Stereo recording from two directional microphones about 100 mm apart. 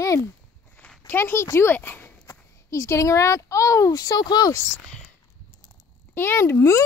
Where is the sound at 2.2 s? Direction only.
30° left (ahead or behind).